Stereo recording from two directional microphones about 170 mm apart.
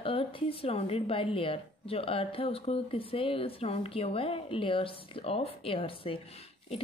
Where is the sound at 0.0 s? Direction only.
35° left (ahead or behind).